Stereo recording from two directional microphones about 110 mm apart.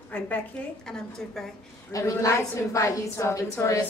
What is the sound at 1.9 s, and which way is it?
A woman's voice, 30° left (ahead or behind).